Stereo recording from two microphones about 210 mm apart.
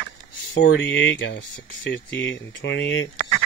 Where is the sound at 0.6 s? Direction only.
60° left (ahead or behind).